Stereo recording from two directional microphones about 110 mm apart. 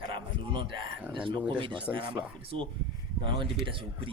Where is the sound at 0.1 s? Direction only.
50° right (ahead or behind).